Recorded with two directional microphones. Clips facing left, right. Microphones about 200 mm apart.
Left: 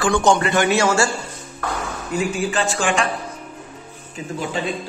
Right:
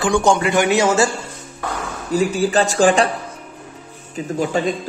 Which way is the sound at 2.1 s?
35° right (ahead or behind).